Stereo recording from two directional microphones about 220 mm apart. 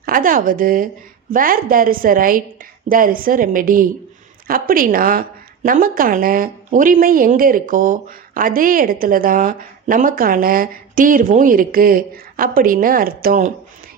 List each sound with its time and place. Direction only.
0.0 s a woman's voice: 40° right (ahead or behind)